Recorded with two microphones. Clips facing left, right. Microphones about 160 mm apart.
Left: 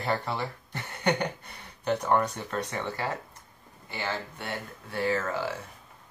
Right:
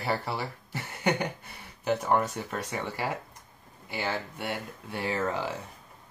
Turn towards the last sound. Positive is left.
turn(degrees=-20)  # may be behind; listen again after turning